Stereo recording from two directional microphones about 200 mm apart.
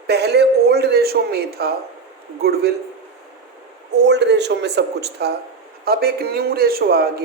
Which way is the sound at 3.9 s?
60° right (ahead or behind).